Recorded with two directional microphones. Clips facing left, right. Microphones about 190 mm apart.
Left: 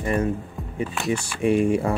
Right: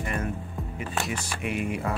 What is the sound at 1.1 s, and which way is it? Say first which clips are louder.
Speech: left 10 dB; 30° left (ahead or behind).